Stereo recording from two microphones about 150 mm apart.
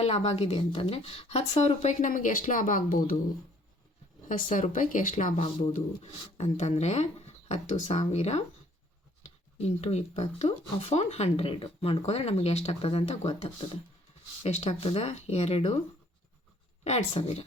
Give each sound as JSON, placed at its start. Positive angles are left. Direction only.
{"t": 0.0, "sound": "speech", "side_deg": 45}
{"t": 4.3, "sound": "speech", "side_deg": 60}
{"t": 5.7, "sound": "speech", "side_deg": 45}
{"t": 9.6, "sound": "speech", "side_deg": 45}
{"t": 16.8, "sound": "speech", "side_deg": 50}